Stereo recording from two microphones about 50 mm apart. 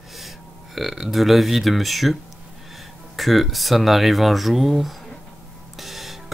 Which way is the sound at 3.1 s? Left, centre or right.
Centre.